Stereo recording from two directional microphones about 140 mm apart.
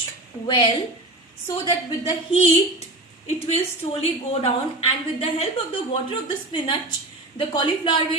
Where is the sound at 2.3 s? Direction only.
50° left (ahead or behind).